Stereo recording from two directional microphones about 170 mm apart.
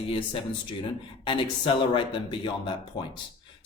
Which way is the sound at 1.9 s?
30° left (ahead or behind).